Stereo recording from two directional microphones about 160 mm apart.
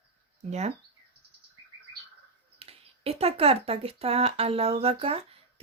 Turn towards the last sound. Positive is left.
turn(degrees=-35)  # may be behind; listen again after turning